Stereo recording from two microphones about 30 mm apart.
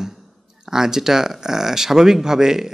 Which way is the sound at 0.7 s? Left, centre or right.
Centre.